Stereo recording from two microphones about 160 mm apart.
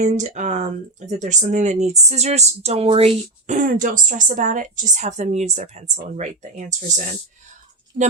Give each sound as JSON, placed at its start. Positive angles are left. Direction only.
{"t": 0.0, "sound": "speech", "side_deg": -50}